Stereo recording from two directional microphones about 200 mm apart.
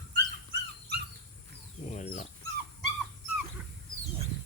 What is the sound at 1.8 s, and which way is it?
Chicken, 35° left (ahead or behind).